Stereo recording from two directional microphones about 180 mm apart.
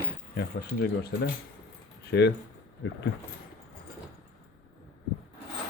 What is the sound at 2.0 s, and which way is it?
Speech, 70° left (ahead or behind).